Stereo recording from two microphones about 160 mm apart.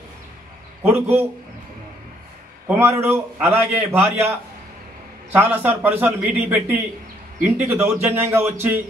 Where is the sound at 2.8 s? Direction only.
15° right (ahead or behind).